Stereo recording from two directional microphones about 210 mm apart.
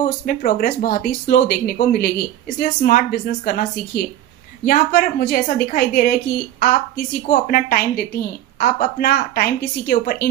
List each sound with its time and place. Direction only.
0.0 s speech: 35° left (ahead or behind)